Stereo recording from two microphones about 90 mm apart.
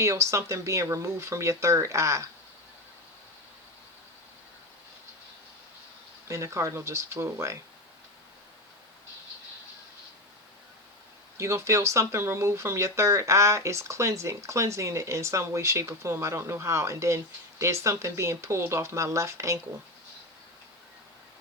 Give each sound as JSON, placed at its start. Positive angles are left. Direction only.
{"t": 0.0, "sound": "speech", "side_deg": -35}
{"t": 6.2, "sound": "speech", "side_deg": -35}
{"t": 11.3, "sound": "speech", "side_deg": -30}